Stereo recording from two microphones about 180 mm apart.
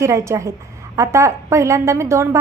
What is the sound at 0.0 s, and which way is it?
A woman's voice, 15° right (ahead or behind).